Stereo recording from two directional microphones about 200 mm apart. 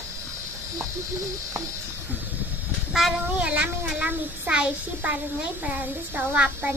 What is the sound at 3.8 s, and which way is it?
A child's voice, 10° right (ahead or behind).